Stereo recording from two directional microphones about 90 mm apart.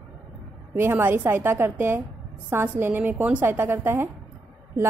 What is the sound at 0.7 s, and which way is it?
A woman's voice, 25° right (ahead or behind).